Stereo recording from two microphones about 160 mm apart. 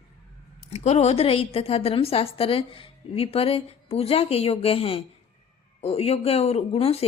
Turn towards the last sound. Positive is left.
turn(degrees=35)  # may be behind; listen again after turning